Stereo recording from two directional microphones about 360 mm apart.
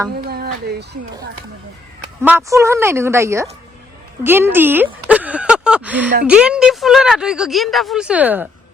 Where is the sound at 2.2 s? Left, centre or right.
Centre.